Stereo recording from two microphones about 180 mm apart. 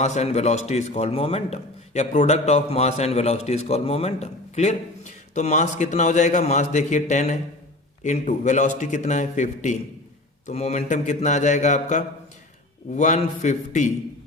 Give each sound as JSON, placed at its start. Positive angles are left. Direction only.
{"t": 0.0, "sound": "a man's voice", "side_deg": 40}